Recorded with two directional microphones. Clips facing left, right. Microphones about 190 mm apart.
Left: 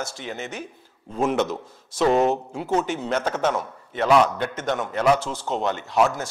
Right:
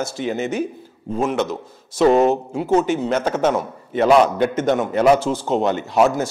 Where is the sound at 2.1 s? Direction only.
40° right (ahead or behind).